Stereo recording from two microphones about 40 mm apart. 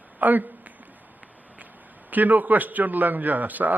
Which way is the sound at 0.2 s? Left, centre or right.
Right.